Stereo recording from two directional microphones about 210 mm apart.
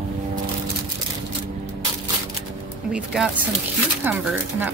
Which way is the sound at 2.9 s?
5° right (ahead or behind).